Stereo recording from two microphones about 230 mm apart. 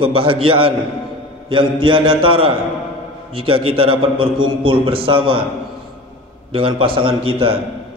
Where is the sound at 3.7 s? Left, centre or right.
Right.